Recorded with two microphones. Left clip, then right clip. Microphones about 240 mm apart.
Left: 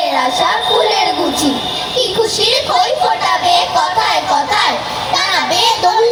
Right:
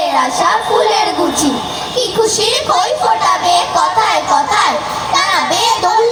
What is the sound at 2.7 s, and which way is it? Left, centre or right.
Music, right.